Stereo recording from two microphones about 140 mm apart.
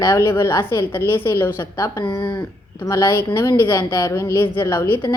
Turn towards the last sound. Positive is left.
turn(degrees=20)  # may be behind; listen again after turning